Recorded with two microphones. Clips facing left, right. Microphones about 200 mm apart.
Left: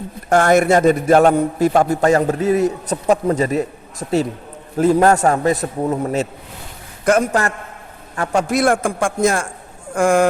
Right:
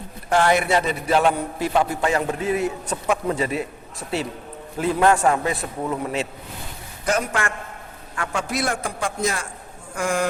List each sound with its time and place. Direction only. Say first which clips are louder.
0.3 s a man's voice: left 6 dB; 45° left (ahead or behind)
4.8 s a man's voice: left 5 dB; 40° left (ahead or behind)